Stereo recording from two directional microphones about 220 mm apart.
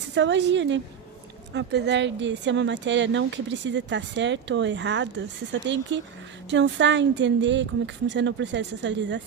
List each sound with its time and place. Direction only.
0.1 s speech: 55° right (ahead or behind)